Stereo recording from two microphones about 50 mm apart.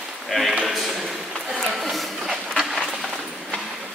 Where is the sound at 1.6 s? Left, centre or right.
Centre.